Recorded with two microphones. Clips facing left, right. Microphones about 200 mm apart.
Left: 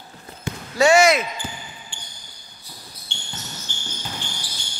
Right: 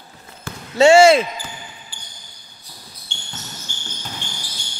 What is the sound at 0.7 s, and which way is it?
Speech, 25° right (ahead or behind).